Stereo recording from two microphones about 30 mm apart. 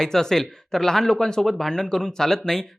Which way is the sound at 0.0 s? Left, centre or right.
Centre.